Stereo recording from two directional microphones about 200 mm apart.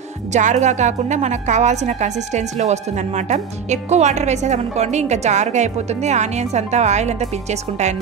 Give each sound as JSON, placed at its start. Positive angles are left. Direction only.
{"t": 0.3, "sound": "a woman's voice", "side_deg": -35}